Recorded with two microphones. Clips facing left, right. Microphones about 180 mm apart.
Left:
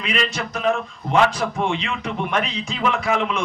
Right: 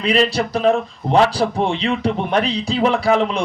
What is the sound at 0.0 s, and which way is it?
A man's voice, 35° right (ahead or behind).